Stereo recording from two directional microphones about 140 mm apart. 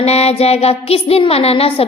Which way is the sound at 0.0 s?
50° left (ahead or behind).